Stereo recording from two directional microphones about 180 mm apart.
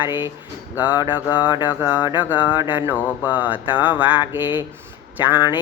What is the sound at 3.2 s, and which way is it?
Mantra, 10° right (ahead or behind).